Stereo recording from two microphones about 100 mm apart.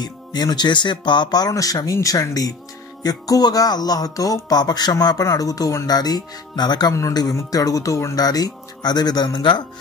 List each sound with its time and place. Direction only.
0.0 s speech: 45° left (ahead or behind)